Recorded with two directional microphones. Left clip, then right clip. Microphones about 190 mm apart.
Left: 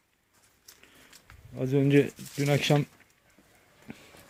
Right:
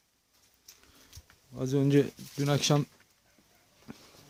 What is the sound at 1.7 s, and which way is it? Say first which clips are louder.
Speech: left 3 dB; 20° right (ahead or behind).